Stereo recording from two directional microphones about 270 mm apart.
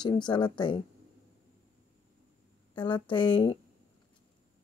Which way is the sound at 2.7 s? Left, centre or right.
Centre.